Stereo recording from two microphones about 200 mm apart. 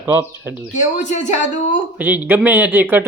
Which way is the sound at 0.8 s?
35° left (ahead or behind).